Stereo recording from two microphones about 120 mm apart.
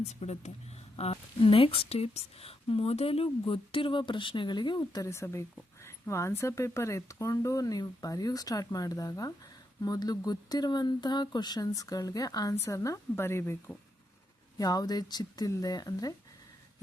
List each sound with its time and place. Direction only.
0.0 s speech: 65° left (ahead or behind); by 13.6 s 20° left (ahead or behind)
14.6 s speech: 35° left (ahead or behind)